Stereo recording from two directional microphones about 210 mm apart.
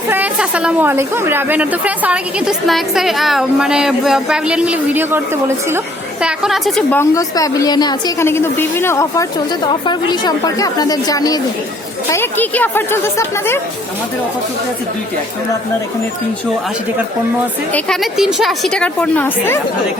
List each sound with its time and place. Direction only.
0.1 s a woman's voice: 5° right (ahead or behind)
6.2 s a woman's voice: centre (ahead or behind)
17.7 s a woman's voice: centre (ahead or behind)